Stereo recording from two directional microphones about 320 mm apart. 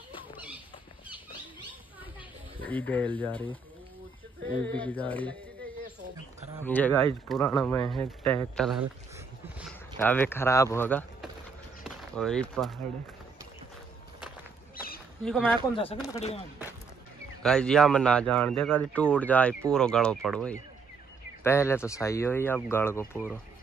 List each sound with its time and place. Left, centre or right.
2.6 s speech: centre
4.7 s speech: centre
6.6 s speech: centre
11.8 s a sound: centre
15.2 s speech: centre
15.7 s speech: centre
17.4 s speech: centre
23.1 s speech: centre